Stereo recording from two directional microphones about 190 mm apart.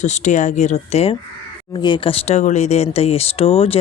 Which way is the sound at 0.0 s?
40° left (ahead or behind).